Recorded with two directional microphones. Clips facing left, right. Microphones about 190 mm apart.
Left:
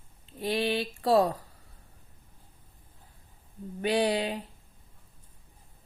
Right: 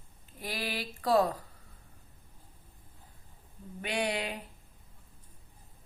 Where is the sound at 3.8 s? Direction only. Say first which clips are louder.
Left 7 dB; 35° left (ahead or behind).